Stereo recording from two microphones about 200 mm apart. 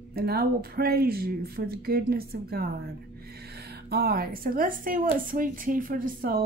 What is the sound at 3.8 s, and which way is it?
A woman's voice, 50° right (ahead or behind).